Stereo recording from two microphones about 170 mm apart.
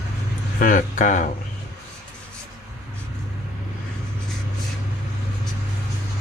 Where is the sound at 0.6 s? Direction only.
50° left (ahead or behind).